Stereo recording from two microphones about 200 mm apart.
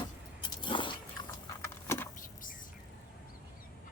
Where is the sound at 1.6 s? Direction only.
10° left (ahead or behind).